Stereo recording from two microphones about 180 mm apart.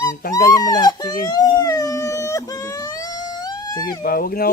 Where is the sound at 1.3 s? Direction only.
20° left (ahead or behind).